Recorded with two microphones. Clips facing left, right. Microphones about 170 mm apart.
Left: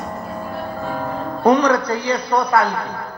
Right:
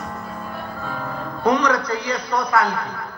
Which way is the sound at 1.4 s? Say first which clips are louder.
Left 4 dB; 35° left (ahead or behind).